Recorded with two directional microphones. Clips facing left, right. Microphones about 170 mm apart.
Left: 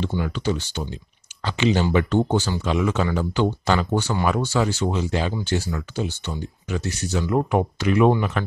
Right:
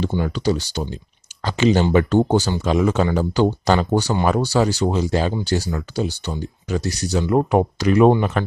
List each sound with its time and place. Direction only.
0.2 s speech: 35° right (ahead or behind)